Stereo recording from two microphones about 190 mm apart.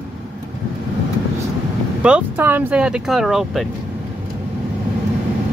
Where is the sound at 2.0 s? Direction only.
5° right (ahead or behind).